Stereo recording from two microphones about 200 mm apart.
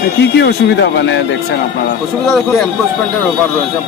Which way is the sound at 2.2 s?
Centre (ahead or behind).